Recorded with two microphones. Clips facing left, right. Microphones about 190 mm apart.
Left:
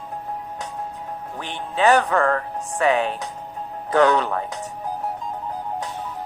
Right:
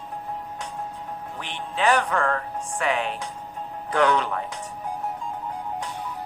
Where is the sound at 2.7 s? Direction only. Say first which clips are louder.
Left 6 dB; 40° left (ahead or behind).